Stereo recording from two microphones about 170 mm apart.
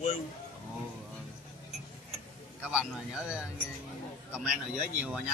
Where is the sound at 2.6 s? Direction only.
5° right (ahead or behind).